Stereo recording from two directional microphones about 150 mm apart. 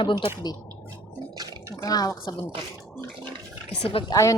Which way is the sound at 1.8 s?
25° left (ahead or behind).